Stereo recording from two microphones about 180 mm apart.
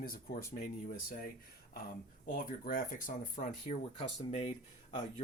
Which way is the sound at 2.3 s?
50° left (ahead or behind).